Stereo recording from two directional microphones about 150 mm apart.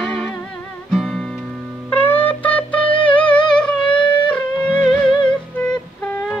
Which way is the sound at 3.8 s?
30° left (ahead or behind).